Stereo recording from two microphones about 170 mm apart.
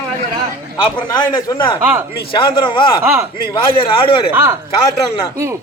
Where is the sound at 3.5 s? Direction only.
30° left (ahead or behind).